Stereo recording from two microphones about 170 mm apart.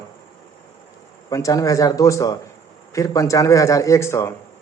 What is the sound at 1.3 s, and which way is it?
Speech, 20° left (ahead or behind).